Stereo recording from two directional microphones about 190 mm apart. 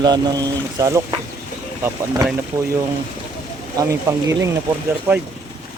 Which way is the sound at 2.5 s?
15° right (ahead or behind).